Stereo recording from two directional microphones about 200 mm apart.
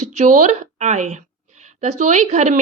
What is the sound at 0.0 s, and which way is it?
Speech, 35° right (ahead or behind).